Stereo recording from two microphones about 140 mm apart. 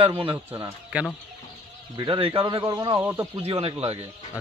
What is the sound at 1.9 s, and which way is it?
Speech, 35° right (ahead or behind).